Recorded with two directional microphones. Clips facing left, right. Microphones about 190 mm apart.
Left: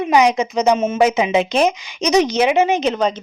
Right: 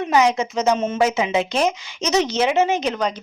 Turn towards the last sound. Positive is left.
turn(degrees=20)  # may be behind; listen again after turning